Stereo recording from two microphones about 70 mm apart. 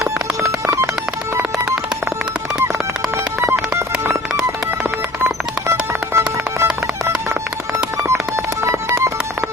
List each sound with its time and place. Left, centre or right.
3.4 s a sound: right
5.9 s music: right
8.6 s music: right